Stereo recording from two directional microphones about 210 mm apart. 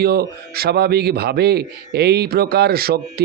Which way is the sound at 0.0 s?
50° right (ahead or behind).